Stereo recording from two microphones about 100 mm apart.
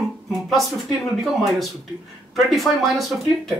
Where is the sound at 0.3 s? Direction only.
Centre (ahead or behind).